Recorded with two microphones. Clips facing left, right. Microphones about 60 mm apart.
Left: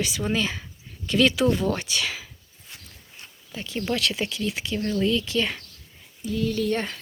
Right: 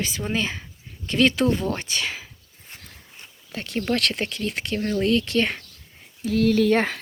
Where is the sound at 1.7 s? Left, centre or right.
Right.